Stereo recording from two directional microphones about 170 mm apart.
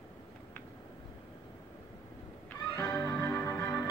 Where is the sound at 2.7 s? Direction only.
20° left (ahead or behind).